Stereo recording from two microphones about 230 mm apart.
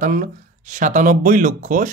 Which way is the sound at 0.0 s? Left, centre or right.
Right.